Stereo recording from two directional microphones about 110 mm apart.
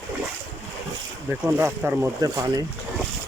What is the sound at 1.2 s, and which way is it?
Speech, 15° right (ahead or behind).